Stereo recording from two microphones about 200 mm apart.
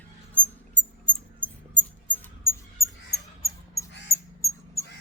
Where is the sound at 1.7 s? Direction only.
10° left (ahead or behind).